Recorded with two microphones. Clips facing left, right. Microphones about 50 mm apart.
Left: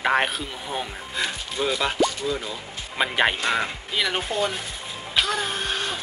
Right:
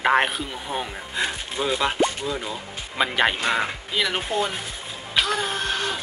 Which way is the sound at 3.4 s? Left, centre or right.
Centre.